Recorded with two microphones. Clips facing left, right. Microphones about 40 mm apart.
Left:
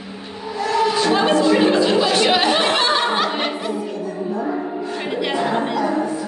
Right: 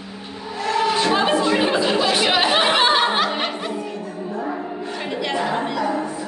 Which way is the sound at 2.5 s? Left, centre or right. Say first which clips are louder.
Right 1 dB; centre.